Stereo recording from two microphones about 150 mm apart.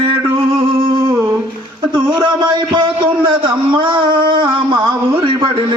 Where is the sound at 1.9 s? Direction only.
30° right (ahead or behind).